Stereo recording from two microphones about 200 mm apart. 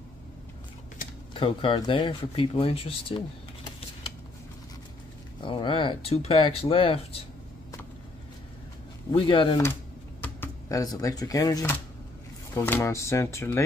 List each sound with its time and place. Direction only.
1.3 s speech: 25° left (ahead or behind)
5.4 s speech: 25° left (ahead or behind)
9.1 s speech: 25° left (ahead or behind)
10.2 s speech: 15° left (ahead or behind)